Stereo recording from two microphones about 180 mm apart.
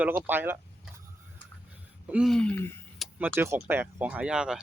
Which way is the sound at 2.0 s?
5° right (ahead or behind).